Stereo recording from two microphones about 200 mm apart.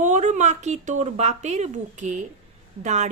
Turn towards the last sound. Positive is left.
turn(degrees=-35)  # may be behind; listen again after turning